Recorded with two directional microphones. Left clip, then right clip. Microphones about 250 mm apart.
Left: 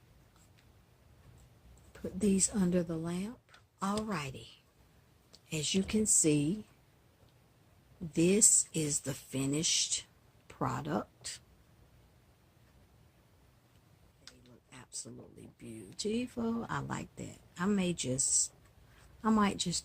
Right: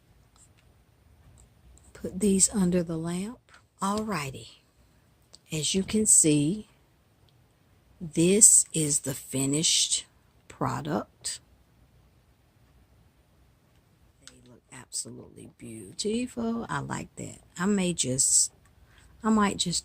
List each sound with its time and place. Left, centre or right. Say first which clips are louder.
1.9 s speech: right 6 dB; right
8.1 s speech: right 7 dB; right
14.7 s a sound: right 8 dB; right
15.5 s speech: right 6 dB; right